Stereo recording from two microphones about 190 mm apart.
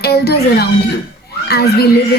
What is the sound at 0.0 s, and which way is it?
A woman's voice, 55° left (ahead or behind).